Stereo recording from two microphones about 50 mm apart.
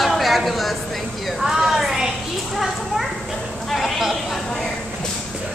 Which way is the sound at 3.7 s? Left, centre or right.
Centre.